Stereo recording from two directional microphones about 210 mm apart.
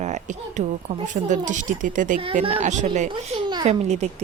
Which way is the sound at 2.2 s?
25° right (ahead or behind).